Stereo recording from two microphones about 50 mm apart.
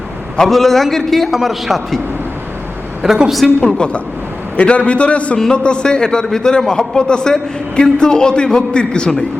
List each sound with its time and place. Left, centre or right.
0.3 s a man's voice: centre
3.0 s a woman's voice: centre
3.8 s a man's voice: left